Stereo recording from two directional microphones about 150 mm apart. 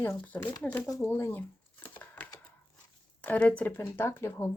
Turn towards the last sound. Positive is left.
turn(degrees=20)  # may be behind; listen again after turning